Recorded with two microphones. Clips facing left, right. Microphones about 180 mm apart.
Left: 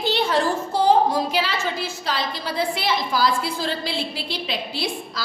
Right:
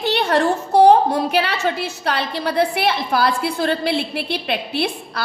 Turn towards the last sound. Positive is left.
turn(degrees=-65)  # may be behind; listen again after turning